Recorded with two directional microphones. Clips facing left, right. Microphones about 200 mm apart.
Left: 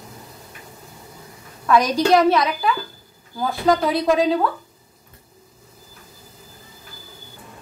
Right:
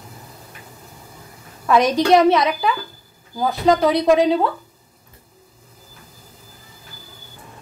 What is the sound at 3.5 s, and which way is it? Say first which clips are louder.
Speech: right 2 dB; 20° right (ahead or behind).